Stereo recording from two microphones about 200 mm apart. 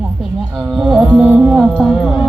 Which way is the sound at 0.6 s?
Centre (ahead or behind).